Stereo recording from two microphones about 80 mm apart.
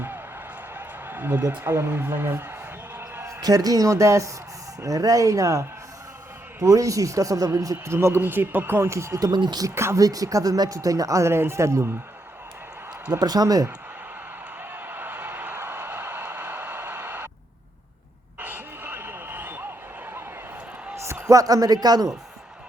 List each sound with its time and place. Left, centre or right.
0.7 s a man's voice: right
3.4 s speech: right
7.9 s a man's voice: right
9.2 s speech: right
9.6 s a man's voice: right
10.0 s speech: right
13.1 s speech: right
14.7 s a sound: right
18.3 s a sound: right
20.9 s a man's voice: right